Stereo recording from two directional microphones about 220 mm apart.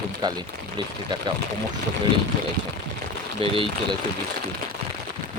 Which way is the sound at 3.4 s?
25° right (ahead or behind).